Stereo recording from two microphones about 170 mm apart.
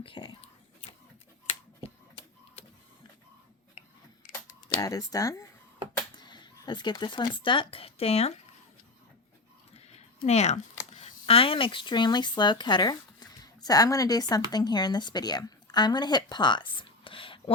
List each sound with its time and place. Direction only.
0.0 s whispering: 30° left (ahead or behind)
1.8 s a sound: 35° left (ahead or behind)
4.8 s speech: 20° left (ahead or behind); by 8.3 s 35° left (ahead or behind)
9.7 s speech: 35° left (ahead or behind)